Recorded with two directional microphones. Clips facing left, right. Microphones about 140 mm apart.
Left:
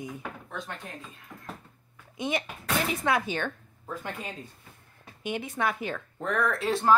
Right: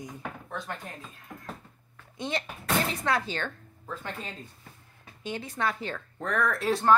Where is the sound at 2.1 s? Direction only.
15° left (ahead or behind).